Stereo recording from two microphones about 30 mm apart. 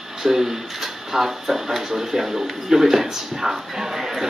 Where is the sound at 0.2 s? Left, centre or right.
Centre.